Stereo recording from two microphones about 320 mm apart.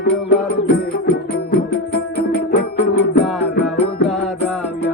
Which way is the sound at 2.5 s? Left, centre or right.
Left.